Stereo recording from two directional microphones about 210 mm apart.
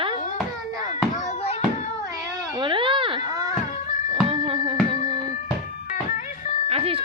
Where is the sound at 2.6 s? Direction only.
25° right (ahead or behind).